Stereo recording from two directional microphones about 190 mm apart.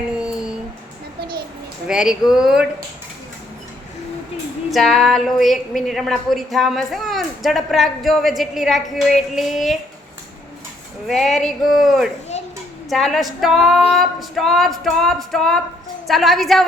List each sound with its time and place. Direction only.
0.2 s a sound: 5° right (ahead or behind)
1.9 s a woman's voice: 5° right (ahead or behind)
4.7 s a woman's voice: centre (ahead or behind)
11.0 s a woman's voice: centre (ahead or behind)